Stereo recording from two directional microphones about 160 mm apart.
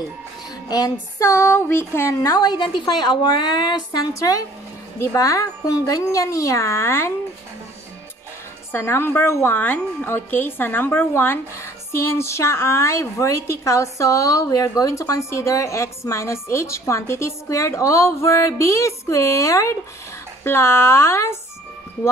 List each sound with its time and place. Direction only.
0.7 s speech: 25° left (ahead or behind)
8.7 s a woman's voice: 15° left (ahead or behind)